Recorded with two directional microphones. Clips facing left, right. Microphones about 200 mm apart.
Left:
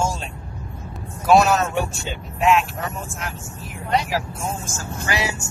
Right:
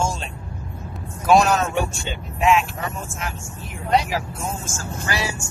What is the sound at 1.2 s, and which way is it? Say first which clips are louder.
Speech: left 1 dB; centre (ahead or behind).